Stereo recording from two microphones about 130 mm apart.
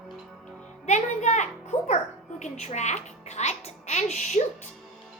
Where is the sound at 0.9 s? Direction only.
65° left (ahead or behind).